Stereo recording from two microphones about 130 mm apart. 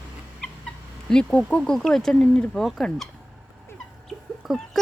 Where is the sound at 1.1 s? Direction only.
5° left (ahead or behind).